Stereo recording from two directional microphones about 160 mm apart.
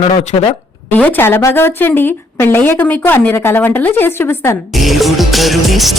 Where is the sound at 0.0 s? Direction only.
35° left (ahead or behind).